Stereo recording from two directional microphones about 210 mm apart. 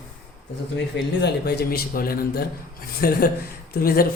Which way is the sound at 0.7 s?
55° left (ahead or behind).